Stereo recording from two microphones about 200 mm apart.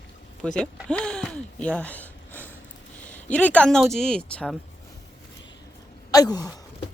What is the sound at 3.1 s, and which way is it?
Speech, 5° left (ahead or behind).